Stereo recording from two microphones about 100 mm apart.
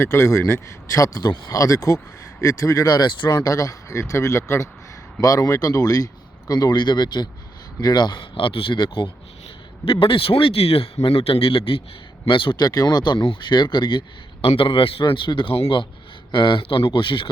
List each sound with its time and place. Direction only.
0.0 s speech: 30° left (ahead or behind); by 1.5 s 45° left (ahead or behind)
1.5 s a man's voice: 35° left (ahead or behind); by 14.0 s 50° left (ahead or behind)
14.4 s speech: 65° left (ahead or behind)